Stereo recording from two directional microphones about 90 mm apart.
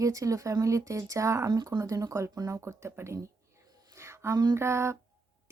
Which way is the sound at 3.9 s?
30° right (ahead or behind).